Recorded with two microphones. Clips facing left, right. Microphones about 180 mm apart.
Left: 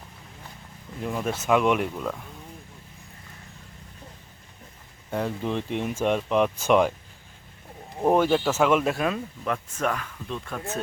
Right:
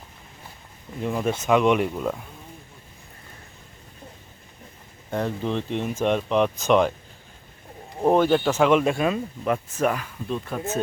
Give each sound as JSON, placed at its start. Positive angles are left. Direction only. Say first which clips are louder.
{"t": 1.0, "sound": "speech", "louder": "right 3 dB", "side_deg": 0}
{"t": 5.1, "sound": "speech", "louder": "right 2 dB", "side_deg": 5}
{"t": 8.0, "sound": "speech", "louder": "right 2 dB", "side_deg": 5}